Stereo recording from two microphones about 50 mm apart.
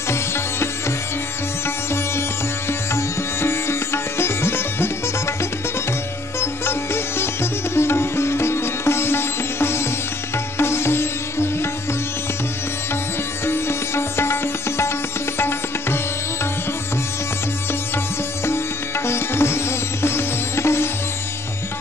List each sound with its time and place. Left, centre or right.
0.1 s sitar: left
2.9 s sitar: left
6.4 s music: left
7.7 s sitar: left
13.5 s music: left
19.0 s sitar: left